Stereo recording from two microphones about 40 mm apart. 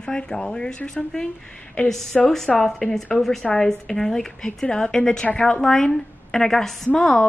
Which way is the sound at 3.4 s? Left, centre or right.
Centre.